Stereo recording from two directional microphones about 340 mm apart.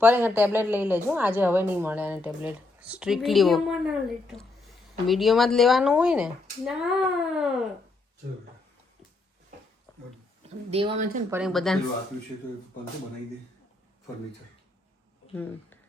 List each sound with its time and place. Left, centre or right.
0.0 s a woman's voice: centre
5.0 s a woman's voice: centre
10.7 s speech: centre
11.3 s a woman's voice: centre